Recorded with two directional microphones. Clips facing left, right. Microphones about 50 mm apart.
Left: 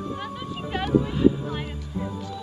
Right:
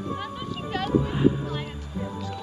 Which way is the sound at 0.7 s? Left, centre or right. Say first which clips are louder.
Left 1 dB; centre.